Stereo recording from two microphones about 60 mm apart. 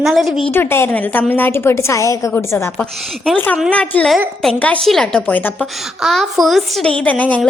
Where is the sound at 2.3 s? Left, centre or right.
Left.